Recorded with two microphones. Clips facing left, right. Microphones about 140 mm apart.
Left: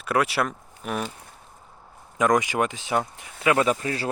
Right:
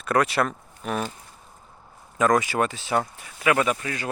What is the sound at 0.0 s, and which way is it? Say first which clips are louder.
Speech: right 1 dB; 10° left (ahead or behind).